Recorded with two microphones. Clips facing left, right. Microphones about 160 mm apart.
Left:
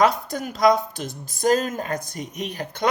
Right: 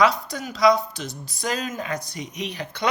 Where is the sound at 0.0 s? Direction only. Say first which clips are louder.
Left 1 dB; 50° left (ahead or behind).